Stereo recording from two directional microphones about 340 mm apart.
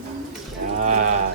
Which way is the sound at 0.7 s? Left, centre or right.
Right.